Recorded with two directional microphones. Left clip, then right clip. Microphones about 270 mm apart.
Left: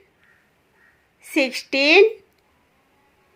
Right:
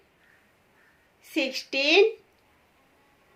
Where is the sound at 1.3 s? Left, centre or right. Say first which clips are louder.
Left 7 dB; left.